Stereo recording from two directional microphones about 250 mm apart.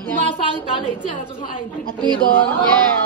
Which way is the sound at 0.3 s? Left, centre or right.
Left.